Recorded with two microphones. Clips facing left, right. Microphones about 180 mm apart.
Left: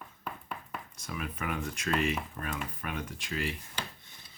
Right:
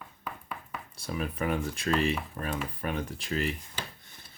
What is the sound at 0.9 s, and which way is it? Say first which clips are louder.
Speech: right 7 dB; 35° right (ahead or behind).